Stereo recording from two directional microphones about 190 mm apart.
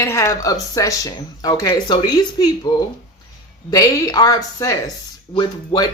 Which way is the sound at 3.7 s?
20° left (ahead or behind).